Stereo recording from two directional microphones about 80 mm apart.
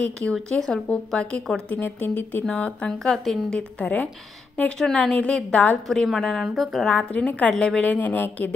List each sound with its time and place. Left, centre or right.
0.0 s speech: centre
6.0 s a woman's voice: centre
7.0 s speech: centre